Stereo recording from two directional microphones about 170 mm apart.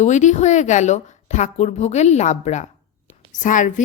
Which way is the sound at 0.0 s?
45° left (ahead or behind).